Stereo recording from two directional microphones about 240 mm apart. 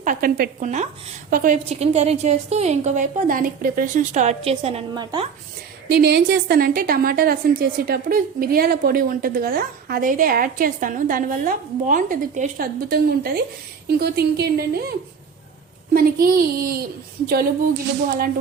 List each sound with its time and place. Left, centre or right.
0.0 s a woman's voice: right
5.9 s a woman's voice: right